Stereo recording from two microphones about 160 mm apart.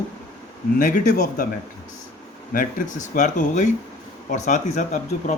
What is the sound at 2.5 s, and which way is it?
Speech, 50° left (ahead or behind).